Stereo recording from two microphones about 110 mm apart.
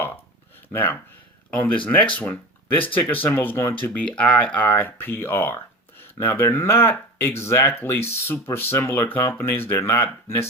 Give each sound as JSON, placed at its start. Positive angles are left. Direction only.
{"t": 0.7, "sound": "speech", "side_deg": 20}